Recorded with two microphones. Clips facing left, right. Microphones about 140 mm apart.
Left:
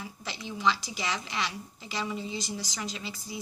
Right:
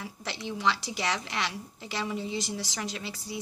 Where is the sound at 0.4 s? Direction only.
75° right (ahead or behind).